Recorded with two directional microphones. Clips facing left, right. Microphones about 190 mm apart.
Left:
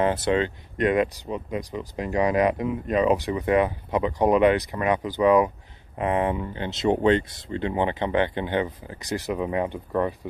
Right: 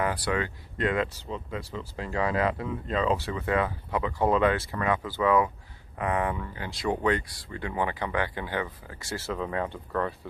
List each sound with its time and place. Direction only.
0.0 s speech: 25° left (ahead or behind)